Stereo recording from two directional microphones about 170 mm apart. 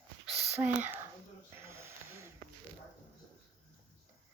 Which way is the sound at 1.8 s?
15° right (ahead or behind).